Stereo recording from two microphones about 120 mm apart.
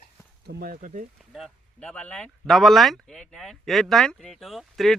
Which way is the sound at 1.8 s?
10° left (ahead or behind).